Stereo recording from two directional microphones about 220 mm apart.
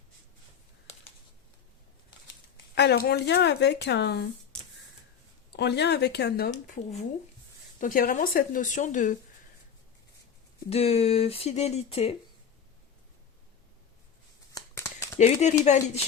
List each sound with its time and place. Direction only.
2.7 s speech: 50° left (ahead or behind)
5.5 s speech: 50° left (ahead or behind)
7.8 s speech: 40° left (ahead or behind)
10.7 s speech: 25° left (ahead or behind)
14.5 s a sound: 10° left (ahead or behind)
15.2 s speech: 30° left (ahead or behind)